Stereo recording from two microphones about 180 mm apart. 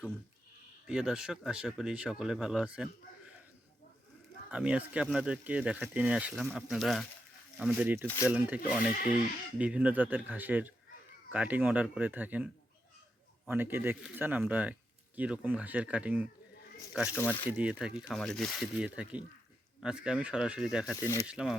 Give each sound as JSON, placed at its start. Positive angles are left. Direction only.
{"t": 0.9, "sound": "speech", "side_deg": -5}
{"t": 4.5, "sound": "speech", "side_deg": -5}
{"t": 8.0, "sound": "speech", "side_deg": 15}
{"t": 8.3, "sound": "speech", "side_deg": -5}
{"t": 13.5, "sound": "speech", "side_deg": -10}
{"t": 20.9, "sound": "speech", "side_deg": 15}
{"t": 21.2, "sound": "speech", "side_deg": -5}